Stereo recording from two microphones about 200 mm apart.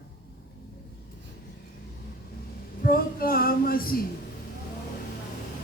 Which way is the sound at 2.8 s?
45° left (ahead or behind).